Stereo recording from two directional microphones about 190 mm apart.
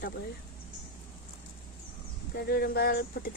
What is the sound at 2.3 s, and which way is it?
Speech, 55° left (ahead or behind).